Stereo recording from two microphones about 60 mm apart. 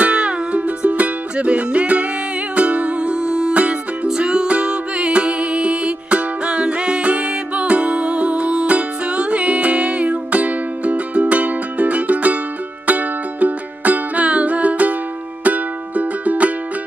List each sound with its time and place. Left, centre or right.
0.0 s music: centre